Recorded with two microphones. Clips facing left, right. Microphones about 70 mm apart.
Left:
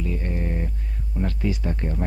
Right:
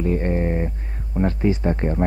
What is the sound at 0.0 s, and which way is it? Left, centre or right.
Music, right.